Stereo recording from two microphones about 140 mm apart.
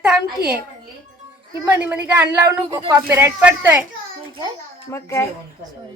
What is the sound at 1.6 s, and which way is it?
Speech, 15° right (ahead or behind).